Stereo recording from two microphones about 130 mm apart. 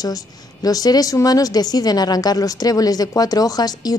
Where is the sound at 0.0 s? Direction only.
30° left (ahead or behind).